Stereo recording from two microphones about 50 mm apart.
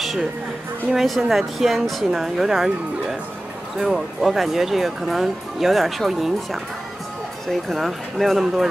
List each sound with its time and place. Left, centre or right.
0.9 s speech: centre